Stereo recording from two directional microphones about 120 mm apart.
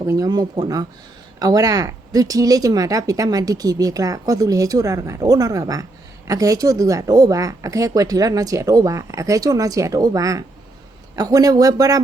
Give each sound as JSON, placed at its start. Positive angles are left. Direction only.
{"t": 0.0, "sound": "speech", "side_deg": -30}